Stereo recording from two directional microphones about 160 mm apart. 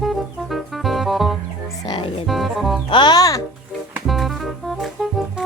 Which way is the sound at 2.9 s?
30° left (ahead or behind).